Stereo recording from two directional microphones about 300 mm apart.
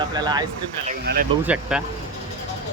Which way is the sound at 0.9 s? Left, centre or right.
Right.